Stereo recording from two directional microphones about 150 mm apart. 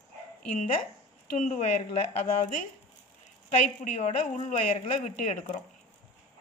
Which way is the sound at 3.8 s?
55° left (ahead or behind).